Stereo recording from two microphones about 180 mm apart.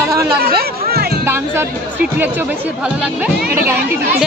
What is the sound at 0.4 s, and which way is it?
Music, 60° right (ahead or behind).